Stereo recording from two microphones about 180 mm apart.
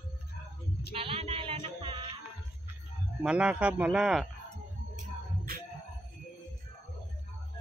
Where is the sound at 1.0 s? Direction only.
30° right (ahead or behind).